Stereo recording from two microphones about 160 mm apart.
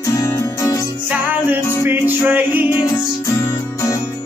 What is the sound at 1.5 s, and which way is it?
Music, 10° right (ahead or behind).